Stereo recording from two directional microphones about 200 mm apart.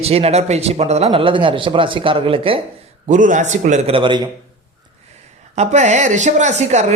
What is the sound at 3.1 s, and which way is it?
A woman's voice, 40° right (ahead or behind).